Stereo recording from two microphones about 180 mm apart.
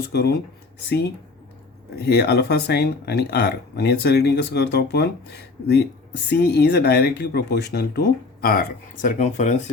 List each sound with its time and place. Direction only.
0.1 s speech: 65° left (ahead or behind)
6.2 s speech: 65° left (ahead or behind); by 9.6 s 40° left (ahead or behind)